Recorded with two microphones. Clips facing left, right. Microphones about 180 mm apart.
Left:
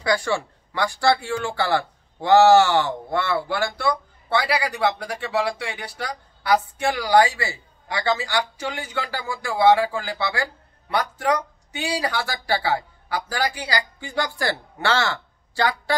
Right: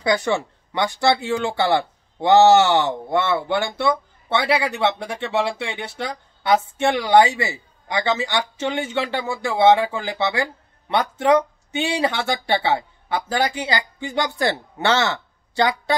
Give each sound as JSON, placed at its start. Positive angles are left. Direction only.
{"t": 0.0, "sound": "speech", "side_deg": -20}